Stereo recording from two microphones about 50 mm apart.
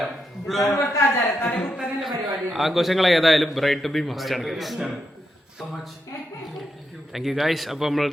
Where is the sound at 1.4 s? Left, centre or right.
Left.